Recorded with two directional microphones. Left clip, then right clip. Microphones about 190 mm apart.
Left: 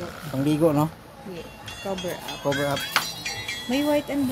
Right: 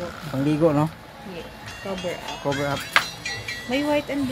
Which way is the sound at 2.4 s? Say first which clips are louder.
Left 1 dB; 10° left (ahead or behind).